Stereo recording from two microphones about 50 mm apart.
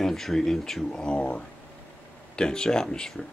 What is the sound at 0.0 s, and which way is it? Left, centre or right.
Speech, centre.